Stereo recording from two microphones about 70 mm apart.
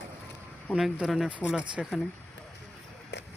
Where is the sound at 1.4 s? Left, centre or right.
Centre.